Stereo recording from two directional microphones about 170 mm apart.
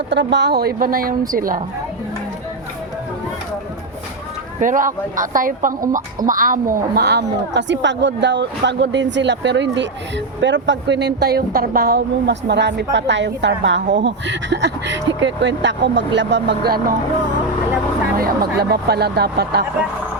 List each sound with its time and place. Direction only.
0.1 s a woman's voice: 90° right; by 1.6 s 55° right (ahead or behind)
4.6 s a woman's voice: 50° right (ahead or behind)
18.7 s speech: 70° right (ahead or behind)